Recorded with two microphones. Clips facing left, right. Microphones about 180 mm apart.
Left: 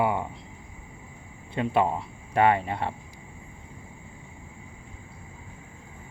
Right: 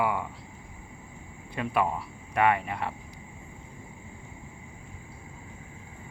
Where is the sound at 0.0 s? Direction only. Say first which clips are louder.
Left 3 dB; 25° left (ahead or behind).